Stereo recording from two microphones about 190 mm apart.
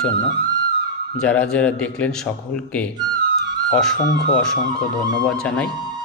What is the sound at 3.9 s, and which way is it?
Speech, 45° left (ahead or behind).